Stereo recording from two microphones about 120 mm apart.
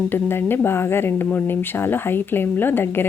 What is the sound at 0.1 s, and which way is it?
Speech, 20° left (ahead or behind).